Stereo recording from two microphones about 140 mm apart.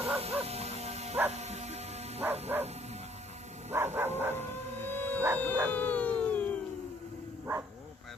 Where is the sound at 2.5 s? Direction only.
15° right (ahead or behind).